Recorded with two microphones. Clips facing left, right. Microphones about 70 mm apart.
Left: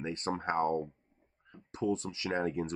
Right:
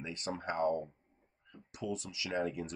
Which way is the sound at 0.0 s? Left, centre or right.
Left.